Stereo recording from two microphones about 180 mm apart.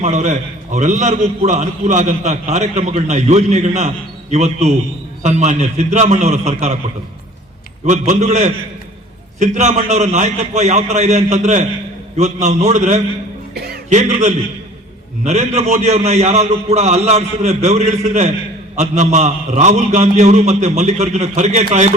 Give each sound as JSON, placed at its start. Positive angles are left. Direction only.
{"t": 0.0, "sound": "a man's voice", "side_deg": -40}
{"t": 7.9, "sound": "a man's voice", "side_deg": -40}
{"t": 13.5, "sound": "a sound", "side_deg": -60}
{"t": 13.9, "sound": "a man's voice", "side_deg": -40}